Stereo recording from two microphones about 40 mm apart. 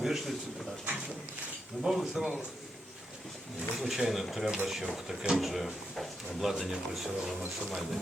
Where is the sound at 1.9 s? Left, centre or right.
Centre.